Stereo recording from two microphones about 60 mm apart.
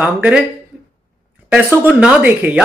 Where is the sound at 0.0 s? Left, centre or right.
Centre.